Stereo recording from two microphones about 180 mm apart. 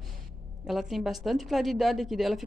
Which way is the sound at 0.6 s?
Centre (ahead or behind).